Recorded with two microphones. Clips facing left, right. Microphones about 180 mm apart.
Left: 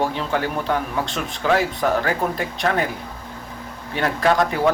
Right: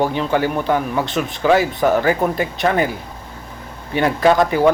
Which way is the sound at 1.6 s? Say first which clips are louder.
Right 4 dB; centre (ahead or behind).